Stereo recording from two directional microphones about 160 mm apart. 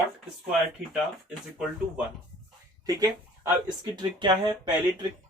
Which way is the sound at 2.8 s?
25° right (ahead or behind).